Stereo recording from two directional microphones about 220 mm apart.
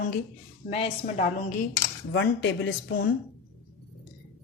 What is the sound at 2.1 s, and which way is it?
A woman's voice, 55° left (ahead or behind).